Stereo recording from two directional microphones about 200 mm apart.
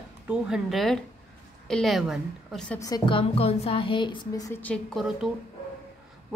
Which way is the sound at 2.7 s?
20° left (ahead or behind).